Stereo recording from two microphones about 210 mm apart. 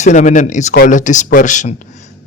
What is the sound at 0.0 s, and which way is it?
Speech, 35° left (ahead or behind).